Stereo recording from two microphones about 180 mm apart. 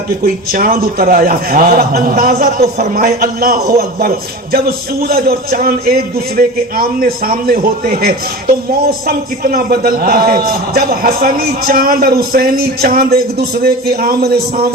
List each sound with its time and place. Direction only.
0.5 s a man's voice: 55° right (ahead or behind)
3.0 s a man's voice: 55° right (ahead or behind)